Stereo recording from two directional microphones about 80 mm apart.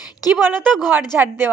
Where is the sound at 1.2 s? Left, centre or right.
Right.